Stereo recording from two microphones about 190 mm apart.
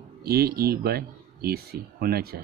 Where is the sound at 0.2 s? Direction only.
55° right (ahead or behind).